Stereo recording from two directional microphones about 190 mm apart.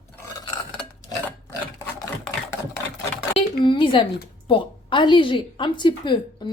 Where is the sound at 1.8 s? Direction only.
15° left (ahead or behind).